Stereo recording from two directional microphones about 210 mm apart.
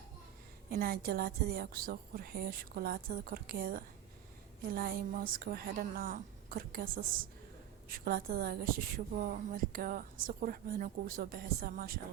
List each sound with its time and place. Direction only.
0.7 s a woman's voice: 45° right (ahead or behind)